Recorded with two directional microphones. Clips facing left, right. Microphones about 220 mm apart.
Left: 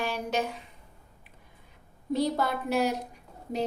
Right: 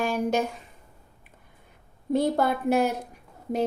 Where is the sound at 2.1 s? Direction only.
50° right (ahead or behind).